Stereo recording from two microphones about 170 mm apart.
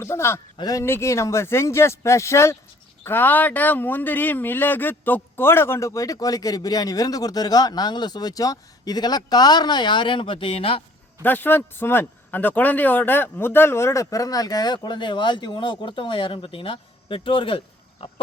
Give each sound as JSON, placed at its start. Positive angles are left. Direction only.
{"t": 0.0, "sound": "a man's voice", "side_deg": 15}
{"t": 11.2, "sound": "a man's voice", "side_deg": 10}